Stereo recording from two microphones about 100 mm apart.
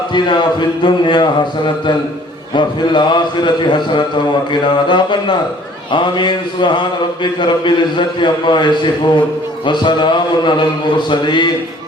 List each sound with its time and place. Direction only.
0.1 s mantra: 50° left (ahead or behind)